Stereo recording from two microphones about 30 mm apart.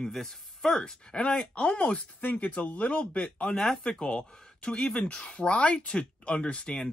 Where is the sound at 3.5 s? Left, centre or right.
Centre.